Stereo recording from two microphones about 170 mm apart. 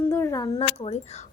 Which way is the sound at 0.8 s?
40° left (ahead or behind).